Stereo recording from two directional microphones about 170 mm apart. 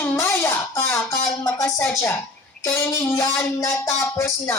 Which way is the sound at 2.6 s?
15° left (ahead or behind).